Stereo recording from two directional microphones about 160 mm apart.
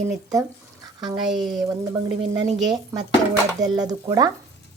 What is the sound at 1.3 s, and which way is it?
Speech, centre (ahead or behind).